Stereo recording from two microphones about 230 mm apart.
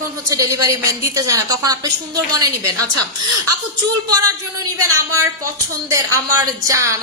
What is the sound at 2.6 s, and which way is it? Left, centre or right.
A woman's voice, right.